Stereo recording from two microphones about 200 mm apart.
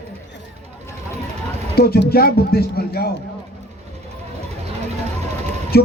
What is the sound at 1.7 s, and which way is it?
A man's voice, 50° left (ahead or behind).